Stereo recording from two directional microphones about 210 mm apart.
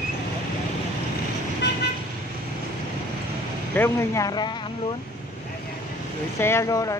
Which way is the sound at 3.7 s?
10° left (ahead or behind).